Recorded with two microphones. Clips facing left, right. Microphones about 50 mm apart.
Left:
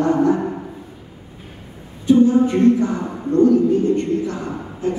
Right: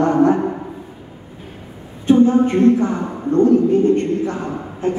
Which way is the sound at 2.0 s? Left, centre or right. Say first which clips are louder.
Right 1 dB; right.